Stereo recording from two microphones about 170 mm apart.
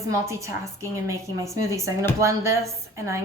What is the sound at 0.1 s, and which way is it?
A woman's voice, 15° right (ahead or behind).